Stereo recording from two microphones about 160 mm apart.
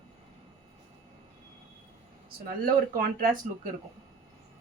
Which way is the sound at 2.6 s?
60° right (ahead or behind).